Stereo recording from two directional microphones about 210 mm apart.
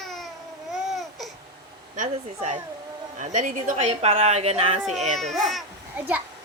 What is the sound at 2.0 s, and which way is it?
A woman's voice, 35° right (ahead or behind).